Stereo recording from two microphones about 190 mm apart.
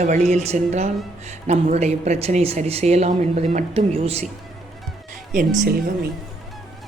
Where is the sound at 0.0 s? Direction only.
35° right (ahead or behind).